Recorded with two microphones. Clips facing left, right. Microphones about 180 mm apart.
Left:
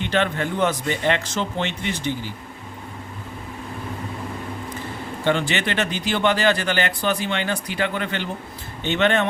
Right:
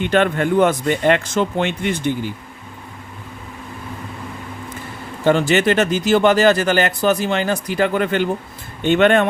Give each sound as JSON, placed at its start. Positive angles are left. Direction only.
{"t": 0.0, "sound": "speech", "side_deg": -50}
{"t": 5.2, "sound": "speech", "side_deg": -40}